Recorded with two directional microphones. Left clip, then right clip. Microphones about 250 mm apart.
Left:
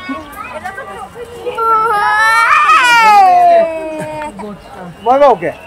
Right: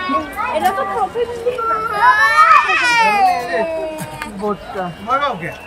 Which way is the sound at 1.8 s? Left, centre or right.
Centre.